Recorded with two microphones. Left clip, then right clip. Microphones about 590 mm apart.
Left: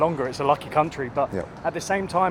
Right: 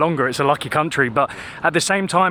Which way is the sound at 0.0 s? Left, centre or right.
Right.